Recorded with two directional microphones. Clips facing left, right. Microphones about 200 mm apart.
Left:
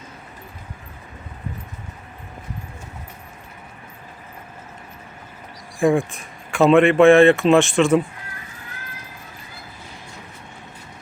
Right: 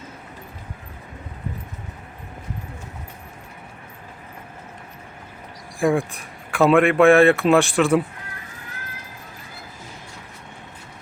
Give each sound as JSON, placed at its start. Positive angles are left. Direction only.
{"t": 5.8, "sound": "speech", "side_deg": 0}